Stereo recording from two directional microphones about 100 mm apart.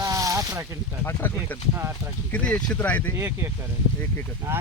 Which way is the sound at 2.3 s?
10° left (ahead or behind).